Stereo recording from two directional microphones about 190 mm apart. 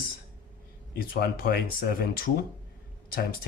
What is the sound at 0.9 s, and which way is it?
Speech, 50° left (ahead or behind).